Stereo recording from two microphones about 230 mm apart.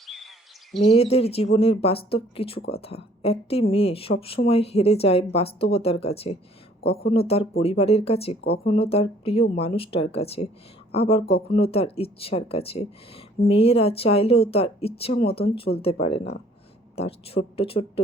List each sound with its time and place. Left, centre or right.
0.9 s speech: left
2.6 s speech: left
2.8 s speech: left